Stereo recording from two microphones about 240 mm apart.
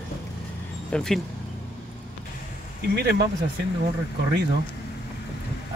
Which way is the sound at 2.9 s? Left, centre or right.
Right.